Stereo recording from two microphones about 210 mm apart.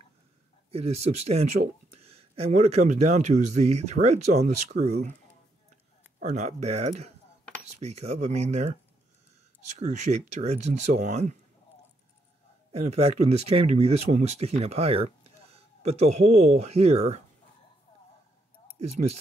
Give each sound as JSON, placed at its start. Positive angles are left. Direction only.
{"t": 0.7, "sound": "speech", "side_deg": -30}
{"t": 6.1, "sound": "speech", "side_deg": -35}
{"t": 12.8, "sound": "speech", "side_deg": -30}